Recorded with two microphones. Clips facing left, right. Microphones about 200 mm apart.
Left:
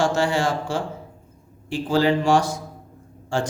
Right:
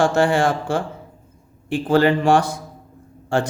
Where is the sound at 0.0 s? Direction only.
55° right (ahead or behind).